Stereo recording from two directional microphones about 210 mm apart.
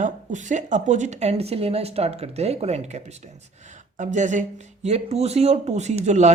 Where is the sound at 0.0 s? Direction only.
35° right (ahead or behind).